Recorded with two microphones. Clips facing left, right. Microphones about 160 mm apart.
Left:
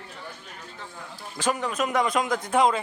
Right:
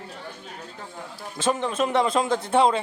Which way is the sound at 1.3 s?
25° right (ahead or behind).